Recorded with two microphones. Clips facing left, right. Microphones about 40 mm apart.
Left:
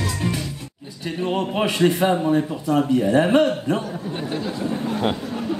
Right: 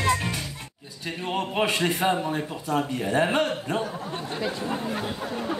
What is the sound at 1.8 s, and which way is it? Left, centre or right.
Speech, left.